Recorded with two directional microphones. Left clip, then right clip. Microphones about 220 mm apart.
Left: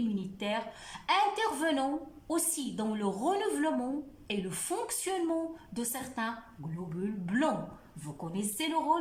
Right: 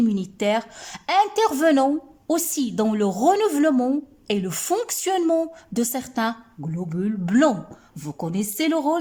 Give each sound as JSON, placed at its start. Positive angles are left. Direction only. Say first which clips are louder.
{"t": 0.2, "sound": "a woman's voice", "louder": "right 12 dB", "side_deg": -50}